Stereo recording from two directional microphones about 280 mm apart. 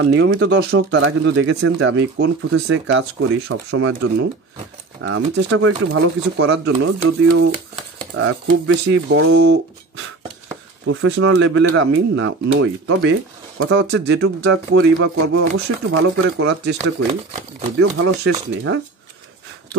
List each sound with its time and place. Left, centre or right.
0.0 s speech: right
8.2 s speech: right
10.9 s speech: right
17.7 s speech: right